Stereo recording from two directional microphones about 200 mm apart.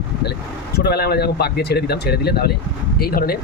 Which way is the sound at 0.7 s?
55° left (ahead or behind).